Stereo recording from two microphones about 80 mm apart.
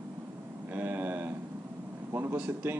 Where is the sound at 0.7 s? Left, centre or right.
Right.